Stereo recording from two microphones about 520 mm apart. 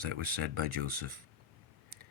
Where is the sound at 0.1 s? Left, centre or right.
Right.